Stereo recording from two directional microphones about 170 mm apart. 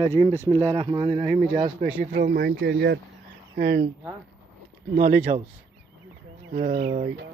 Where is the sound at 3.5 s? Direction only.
75° right (ahead or behind).